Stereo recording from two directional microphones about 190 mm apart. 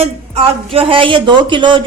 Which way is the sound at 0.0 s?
30° right (ahead or behind).